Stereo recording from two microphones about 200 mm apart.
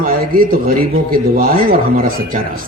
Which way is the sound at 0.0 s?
45° right (ahead or behind).